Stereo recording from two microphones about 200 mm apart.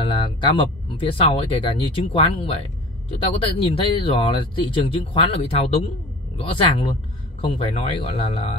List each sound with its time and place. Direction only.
0.0 s speech: 25° left (ahead or behind)